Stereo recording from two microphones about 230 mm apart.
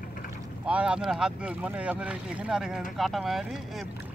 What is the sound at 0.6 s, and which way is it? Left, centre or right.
Speech, centre.